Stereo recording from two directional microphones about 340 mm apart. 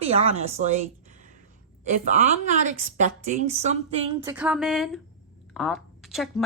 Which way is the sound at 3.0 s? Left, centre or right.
Right.